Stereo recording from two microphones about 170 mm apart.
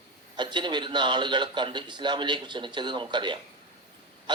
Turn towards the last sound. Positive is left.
turn(degrees=-25)  # may be behind; listen again after turning